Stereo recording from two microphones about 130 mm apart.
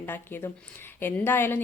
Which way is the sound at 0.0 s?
15° left (ahead or behind).